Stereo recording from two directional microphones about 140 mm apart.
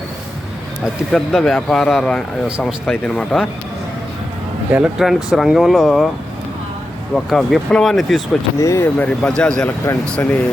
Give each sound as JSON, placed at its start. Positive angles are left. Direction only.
{"t": 1.1, "sound": "speech", "side_deg": 5}
{"t": 2.9, "sound": "a man's voice", "side_deg": 10}
{"t": 4.7, "sound": "speech", "side_deg": -5}
{"t": 7.1, "sound": "speech", "side_deg": 0}
{"t": 8.5, "sound": "speech", "side_deg": 20}
{"t": 9.2, "sound": "a man's voice", "side_deg": 5}